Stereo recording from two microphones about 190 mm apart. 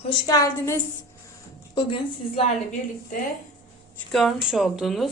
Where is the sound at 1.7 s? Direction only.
25° left (ahead or behind).